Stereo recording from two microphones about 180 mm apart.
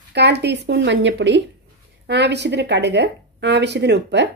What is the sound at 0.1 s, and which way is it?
Speech, 70° right (ahead or behind).